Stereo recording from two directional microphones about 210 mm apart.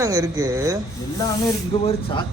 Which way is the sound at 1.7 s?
20° left (ahead or behind).